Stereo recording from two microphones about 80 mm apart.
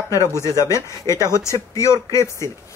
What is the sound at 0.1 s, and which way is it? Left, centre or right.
Speech, right.